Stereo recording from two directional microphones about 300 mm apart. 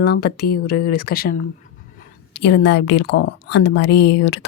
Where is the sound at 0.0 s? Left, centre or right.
Left.